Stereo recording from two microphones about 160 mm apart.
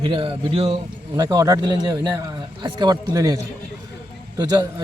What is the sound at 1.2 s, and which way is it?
Speech, 20° right (ahead or behind).